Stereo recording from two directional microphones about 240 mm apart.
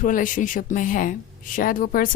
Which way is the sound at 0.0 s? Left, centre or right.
Left.